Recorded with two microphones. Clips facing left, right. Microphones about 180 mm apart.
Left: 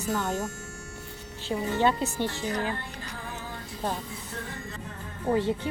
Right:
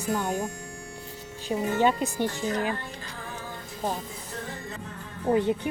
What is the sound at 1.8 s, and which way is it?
Speech, 15° right (ahead or behind).